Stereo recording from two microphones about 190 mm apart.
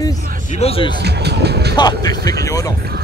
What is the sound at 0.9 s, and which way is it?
Speech, 60° right (ahead or behind).